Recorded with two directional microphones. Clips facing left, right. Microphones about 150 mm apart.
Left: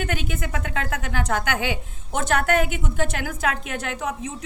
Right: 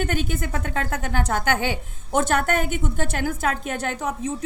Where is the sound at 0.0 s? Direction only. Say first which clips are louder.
Right 3 dB; 40° right (ahead or behind).